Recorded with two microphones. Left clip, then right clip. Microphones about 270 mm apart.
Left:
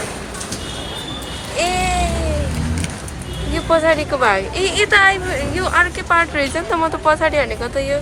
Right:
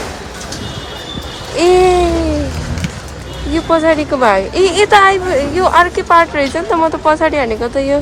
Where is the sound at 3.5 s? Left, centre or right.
Centre.